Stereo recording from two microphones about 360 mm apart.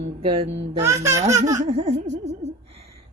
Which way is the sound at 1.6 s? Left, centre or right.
Centre.